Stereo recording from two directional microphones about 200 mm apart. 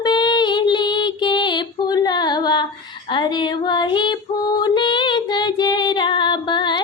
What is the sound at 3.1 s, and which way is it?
Female singing, 25° left (ahead or behind).